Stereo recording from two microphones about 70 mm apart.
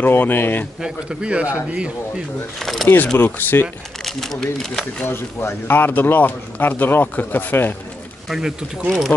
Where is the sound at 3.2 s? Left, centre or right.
Left.